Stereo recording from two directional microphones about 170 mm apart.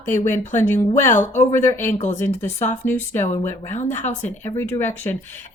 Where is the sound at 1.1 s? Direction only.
45° left (ahead or behind).